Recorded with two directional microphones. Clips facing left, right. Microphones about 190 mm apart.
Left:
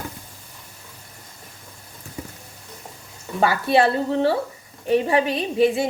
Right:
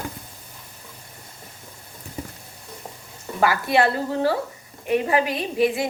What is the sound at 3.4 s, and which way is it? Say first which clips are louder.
A woman's voice: left 2 dB; 25° left (ahead or behind).